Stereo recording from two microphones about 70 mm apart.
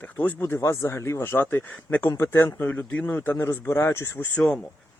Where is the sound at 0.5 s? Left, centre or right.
Left.